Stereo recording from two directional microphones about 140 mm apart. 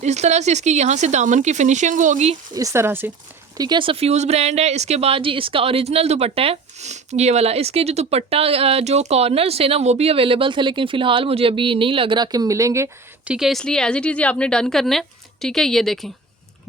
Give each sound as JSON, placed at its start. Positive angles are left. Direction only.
{"t": 0.0, "sound": "speech", "side_deg": -55}
{"t": 2.5, "sound": "speech", "side_deg": -25}
{"t": 3.6, "sound": "speech", "side_deg": -35}
{"t": 13.2, "sound": "a woman's voice", "side_deg": -5}